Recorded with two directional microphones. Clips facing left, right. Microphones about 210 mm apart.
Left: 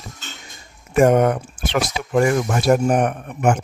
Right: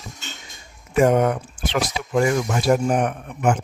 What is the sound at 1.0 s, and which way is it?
Speech, 50° left (ahead or behind).